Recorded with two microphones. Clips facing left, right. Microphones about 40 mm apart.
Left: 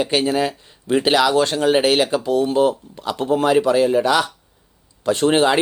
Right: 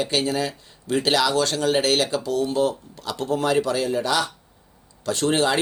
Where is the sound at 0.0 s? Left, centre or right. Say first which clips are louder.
Left 5 dB; left.